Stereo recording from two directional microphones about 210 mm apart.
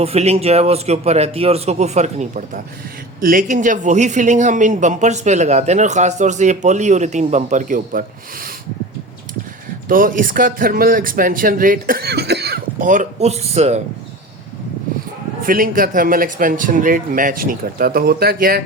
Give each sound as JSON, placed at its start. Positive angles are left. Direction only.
{"t": 0.0, "sound": "speech", "side_deg": -30}
{"t": 9.9, "sound": "speech", "side_deg": -40}
{"t": 15.4, "sound": "a man's voice", "side_deg": -40}